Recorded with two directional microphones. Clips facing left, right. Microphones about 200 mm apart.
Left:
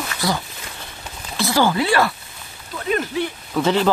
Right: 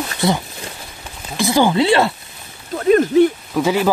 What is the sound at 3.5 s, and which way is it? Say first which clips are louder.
Speech: left 3 dB; 10° right (ahead or behind).